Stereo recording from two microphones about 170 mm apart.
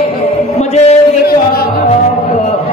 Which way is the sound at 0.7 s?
40° left (ahead or behind).